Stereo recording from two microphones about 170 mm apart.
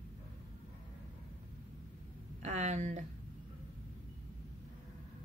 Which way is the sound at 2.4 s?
45° right (ahead or behind).